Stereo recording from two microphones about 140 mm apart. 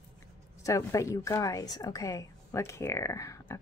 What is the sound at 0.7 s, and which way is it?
A woman's voice, 25° left (ahead or behind).